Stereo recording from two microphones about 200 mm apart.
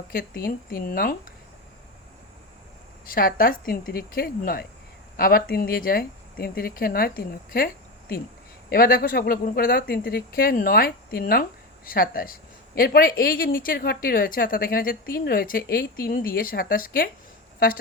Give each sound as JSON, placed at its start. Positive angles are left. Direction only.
{"t": 0.1, "sound": "speech", "side_deg": 45}
{"t": 3.1, "sound": "speech", "side_deg": 45}